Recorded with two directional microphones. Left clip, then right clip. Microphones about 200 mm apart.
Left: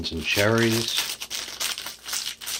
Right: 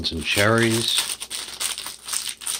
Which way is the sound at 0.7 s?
Centre (ahead or behind).